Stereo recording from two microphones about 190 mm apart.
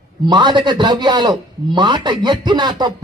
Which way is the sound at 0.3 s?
25° right (ahead or behind).